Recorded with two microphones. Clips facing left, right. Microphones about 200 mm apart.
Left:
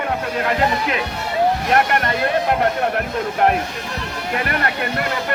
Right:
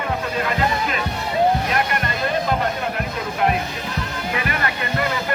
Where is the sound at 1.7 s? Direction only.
65° left (ahead or behind).